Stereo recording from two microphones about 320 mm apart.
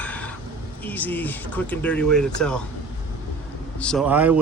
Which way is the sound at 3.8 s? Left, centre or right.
Centre.